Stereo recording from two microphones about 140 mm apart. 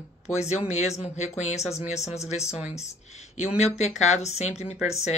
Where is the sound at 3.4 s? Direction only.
50° left (ahead or behind).